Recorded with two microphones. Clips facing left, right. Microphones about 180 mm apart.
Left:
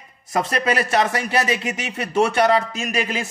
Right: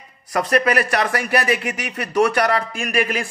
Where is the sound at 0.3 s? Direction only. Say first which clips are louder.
Right 3 dB; 25° left (ahead or behind).